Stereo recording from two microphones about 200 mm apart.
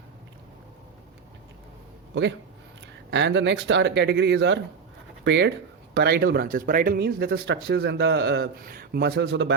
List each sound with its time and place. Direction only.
2.8 s speech: 60° right (ahead or behind)